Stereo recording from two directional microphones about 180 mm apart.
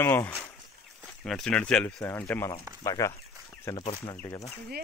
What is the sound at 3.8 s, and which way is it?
Speech, 30° left (ahead or behind).